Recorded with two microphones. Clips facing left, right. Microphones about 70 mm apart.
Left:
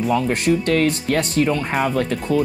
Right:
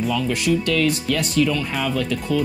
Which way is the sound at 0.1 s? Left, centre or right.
Left.